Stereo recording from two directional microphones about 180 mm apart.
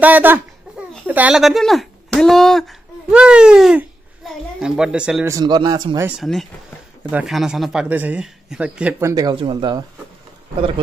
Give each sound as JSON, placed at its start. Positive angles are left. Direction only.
{"t": 0.0, "sound": "a child's voice", "side_deg": -10}
{"t": 5.3, "sound": "speech", "side_deg": -25}
{"t": 6.0, "sound": "a child's voice", "side_deg": 0}
{"t": 9.1, "sound": "speech", "side_deg": -25}